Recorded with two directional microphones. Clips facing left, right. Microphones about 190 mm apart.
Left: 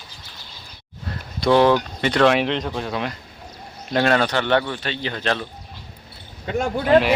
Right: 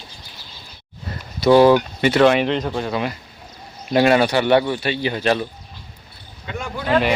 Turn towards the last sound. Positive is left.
turn(degrees=40)  # may be behind; listen again after turning